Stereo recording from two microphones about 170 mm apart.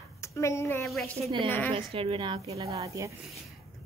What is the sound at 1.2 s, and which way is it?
Speech, 30° right (ahead or behind).